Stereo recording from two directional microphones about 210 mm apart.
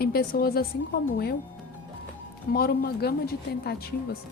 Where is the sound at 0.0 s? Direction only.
45° left (ahead or behind).